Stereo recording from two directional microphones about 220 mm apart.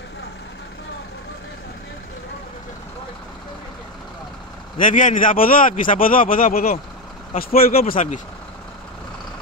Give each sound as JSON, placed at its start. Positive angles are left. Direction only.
{"t": 4.7, "sound": "a man's voice", "side_deg": 35}